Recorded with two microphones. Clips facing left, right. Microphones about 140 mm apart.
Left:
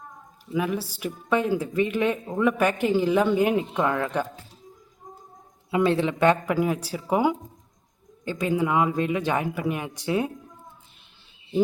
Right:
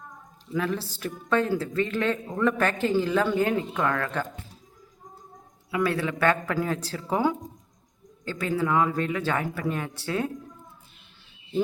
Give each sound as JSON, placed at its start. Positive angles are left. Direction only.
{"t": 0.5, "sound": "speech", "side_deg": 15}
{"t": 5.7, "sound": "speech", "side_deg": 25}